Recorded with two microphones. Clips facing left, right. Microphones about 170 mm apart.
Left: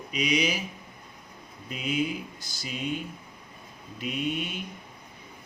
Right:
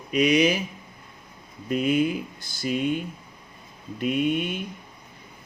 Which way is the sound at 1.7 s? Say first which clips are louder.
Right 7 dB; 55° right (ahead or behind).